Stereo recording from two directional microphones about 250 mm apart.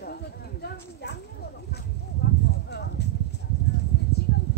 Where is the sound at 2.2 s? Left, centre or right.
Left.